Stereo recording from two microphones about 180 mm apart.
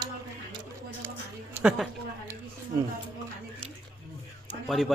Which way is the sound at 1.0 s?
10° right (ahead or behind).